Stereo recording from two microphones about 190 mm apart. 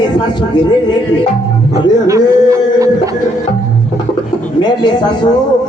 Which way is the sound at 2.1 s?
15° right (ahead or behind).